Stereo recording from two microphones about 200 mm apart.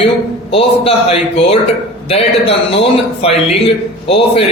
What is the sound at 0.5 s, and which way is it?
A man's voice, 30° left (ahead or behind).